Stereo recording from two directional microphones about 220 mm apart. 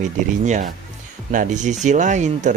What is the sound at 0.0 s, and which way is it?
Speech, 35° right (ahead or behind).